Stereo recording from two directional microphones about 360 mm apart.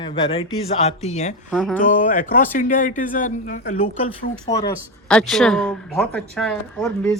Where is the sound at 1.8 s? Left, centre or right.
Left.